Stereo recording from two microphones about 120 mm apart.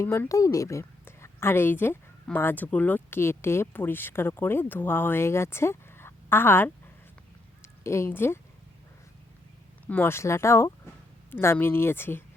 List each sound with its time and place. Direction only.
0.0 s a woman's voice: 25° left (ahead or behind)
9.8 s speech: 15° left (ahead or behind)